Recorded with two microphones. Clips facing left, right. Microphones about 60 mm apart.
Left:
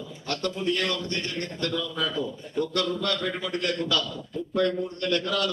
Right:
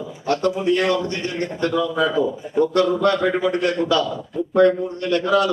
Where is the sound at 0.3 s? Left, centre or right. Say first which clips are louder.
Right 9 dB; centre.